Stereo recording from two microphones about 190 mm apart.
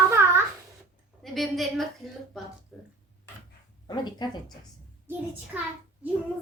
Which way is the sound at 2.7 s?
Centre (ahead or behind).